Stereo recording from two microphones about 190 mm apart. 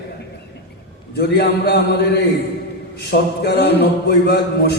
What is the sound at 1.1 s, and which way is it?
A man's voice, 60° left (ahead or behind).